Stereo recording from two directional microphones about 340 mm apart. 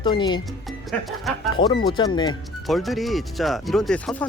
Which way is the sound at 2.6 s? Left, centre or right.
Centre.